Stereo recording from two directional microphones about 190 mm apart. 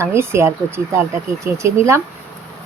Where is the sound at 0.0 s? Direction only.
15° right (ahead or behind).